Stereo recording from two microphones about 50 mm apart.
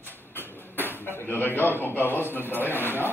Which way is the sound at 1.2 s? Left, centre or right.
Left.